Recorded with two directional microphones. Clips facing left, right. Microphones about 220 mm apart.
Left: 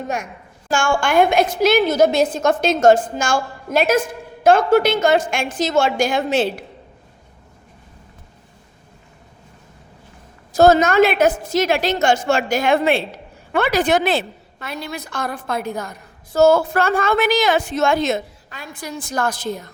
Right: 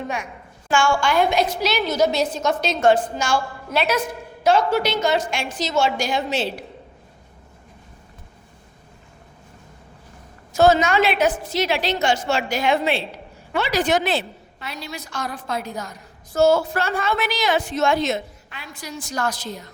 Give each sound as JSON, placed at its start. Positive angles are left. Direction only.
{"t": 0.7, "sound": "a woman's voice", "side_deg": 50}
{"t": 10.5, "sound": "a woman's voice", "side_deg": 40}